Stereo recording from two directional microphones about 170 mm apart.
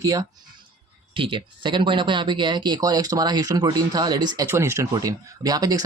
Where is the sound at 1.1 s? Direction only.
30° right (ahead or behind).